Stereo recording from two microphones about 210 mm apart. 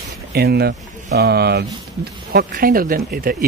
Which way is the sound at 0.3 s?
50° right (ahead or behind).